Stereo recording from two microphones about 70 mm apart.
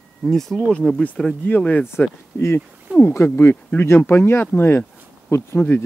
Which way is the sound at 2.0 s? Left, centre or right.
Left.